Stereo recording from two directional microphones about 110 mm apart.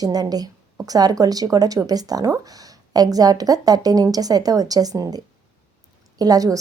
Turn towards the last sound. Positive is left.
turn(degrees=-35)  # may be behind; listen again after turning